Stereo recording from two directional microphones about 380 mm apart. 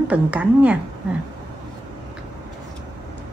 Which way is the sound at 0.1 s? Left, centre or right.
Centre.